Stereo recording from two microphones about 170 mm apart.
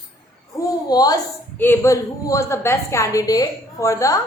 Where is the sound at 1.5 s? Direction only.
10° left (ahead or behind).